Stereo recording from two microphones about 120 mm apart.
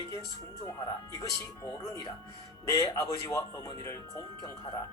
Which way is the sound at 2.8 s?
25° left (ahead or behind).